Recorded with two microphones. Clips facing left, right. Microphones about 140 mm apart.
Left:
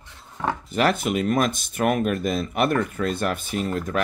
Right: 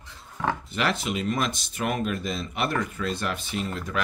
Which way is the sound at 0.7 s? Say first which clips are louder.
Left 6 dB; 45° left (ahead or behind).